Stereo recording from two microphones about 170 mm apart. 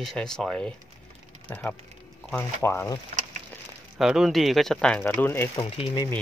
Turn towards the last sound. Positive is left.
turn(degrees=25)  # may be behind; listen again after turning